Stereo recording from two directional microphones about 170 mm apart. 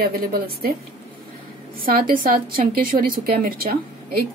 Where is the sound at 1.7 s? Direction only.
55° right (ahead or behind).